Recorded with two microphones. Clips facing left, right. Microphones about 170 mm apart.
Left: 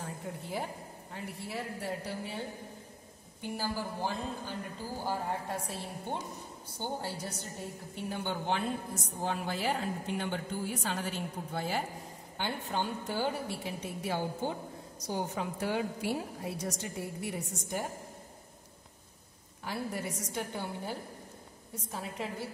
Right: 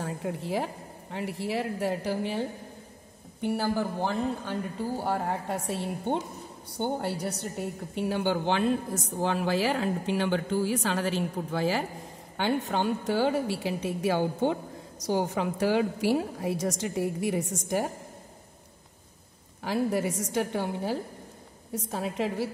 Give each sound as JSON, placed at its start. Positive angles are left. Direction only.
{"t": 0.0, "sound": "a woman's voice", "side_deg": -90}
{"t": 3.3, "sound": "a man's voice", "side_deg": -65}
{"t": 19.6, "sound": "a woman's voice", "side_deg": -90}